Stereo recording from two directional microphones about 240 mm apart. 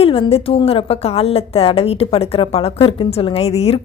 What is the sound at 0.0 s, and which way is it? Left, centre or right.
A woman's voice, left.